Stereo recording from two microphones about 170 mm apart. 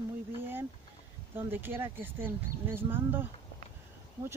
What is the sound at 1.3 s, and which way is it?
Speech, 10° right (ahead or behind).